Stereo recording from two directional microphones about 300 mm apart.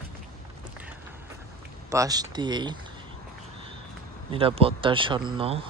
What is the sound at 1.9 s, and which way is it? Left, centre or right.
Speech, centre.